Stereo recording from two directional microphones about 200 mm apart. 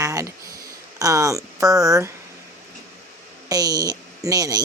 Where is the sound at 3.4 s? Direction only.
20° right (ahead or behind).